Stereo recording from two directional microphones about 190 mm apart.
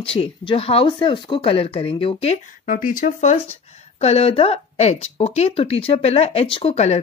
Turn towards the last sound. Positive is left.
turn(degrees=35)  # may be behind; listen again after turning